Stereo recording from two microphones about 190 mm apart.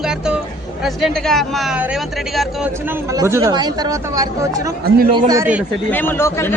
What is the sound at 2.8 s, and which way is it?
Speech, 15° right (ahead or behind).